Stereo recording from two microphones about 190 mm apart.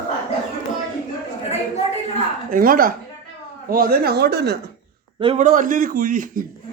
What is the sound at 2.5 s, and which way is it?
A man's voice, 50° right (ahead or behind).